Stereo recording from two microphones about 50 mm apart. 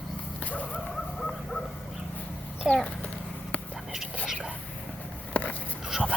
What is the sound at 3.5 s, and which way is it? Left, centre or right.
Whispering, left.